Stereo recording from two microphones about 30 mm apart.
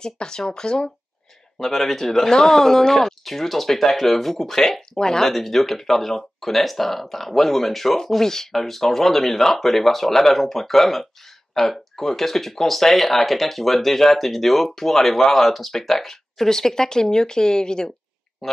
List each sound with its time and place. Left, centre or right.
0.0 s speech: left
1.7 s speech: centre
4.9 s speech: centre
5.3 s speech: centre
16.1 s speech: centre